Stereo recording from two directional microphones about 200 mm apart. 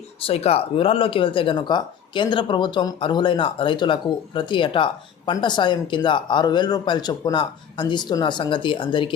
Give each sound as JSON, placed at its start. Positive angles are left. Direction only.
{"t": 0.2, "sound": "speech", "side_deg": 30}